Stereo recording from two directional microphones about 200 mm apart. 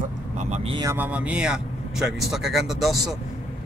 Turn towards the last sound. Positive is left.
turn(degrees=0)  # may be behind; listen again after turning